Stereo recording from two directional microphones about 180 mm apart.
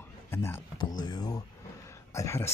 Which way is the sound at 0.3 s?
15° left (ahead or behind).